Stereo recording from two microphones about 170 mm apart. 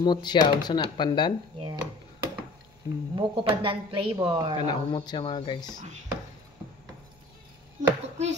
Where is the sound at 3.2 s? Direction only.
30° right (ahead or behind).